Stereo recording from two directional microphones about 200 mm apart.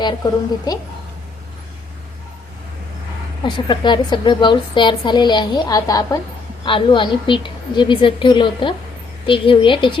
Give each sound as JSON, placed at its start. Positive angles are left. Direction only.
{"t": 0.2, "sound": "a woman's voice", "side_deg": 20}
{"t": 3.4, "sound": "a woman's voice", "side_deg": 20}